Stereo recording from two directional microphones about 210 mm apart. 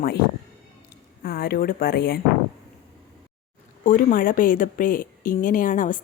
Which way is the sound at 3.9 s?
40° left (ahead or behind).